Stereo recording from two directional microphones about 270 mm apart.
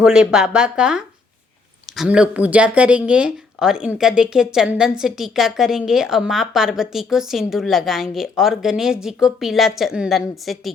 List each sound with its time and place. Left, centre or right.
0.0 s speech: centre